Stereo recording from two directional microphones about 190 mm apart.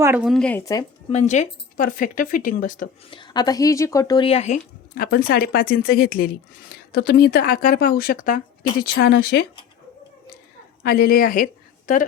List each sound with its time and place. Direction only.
0.3 s speech: 5° left (ahead or behind)
0.6 s speech: 15° left (ahead or behind)
1.1 s speech: 35° left (ahead or behind)
3.1 s speech: 25° left (ahead or behind)
4.9 s speech: 50° left (ahead or behind)
9.0 s speech: 60° left (ahead or behind)
10.8 s speech: 50° left (ahead or behind)